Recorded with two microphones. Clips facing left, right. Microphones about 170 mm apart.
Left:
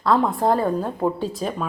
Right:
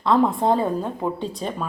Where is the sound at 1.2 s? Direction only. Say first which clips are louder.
Left 2 dB; 5° left (ahead or behind).